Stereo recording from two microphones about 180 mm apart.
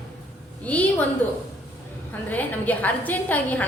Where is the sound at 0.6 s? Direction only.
10° left (ahead or behind).